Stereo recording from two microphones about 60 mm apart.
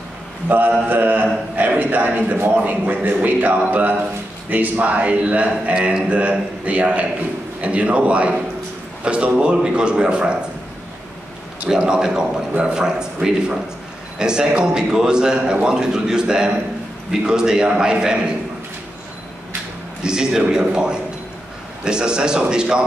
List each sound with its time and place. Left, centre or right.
0.5 s mantra: right
1.8 s a man's voice: right
11.6 s a man's voice: centre
20.0 s a man's voice: centre